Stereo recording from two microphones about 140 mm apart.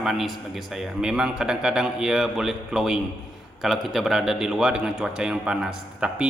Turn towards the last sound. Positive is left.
turn(degrees=-5)  # may be behind; listen again after turning